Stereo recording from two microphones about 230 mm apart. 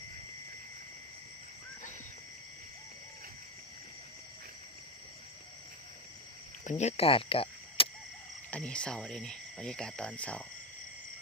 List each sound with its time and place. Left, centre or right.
6.7 s speech: left
8.4 s speech: centre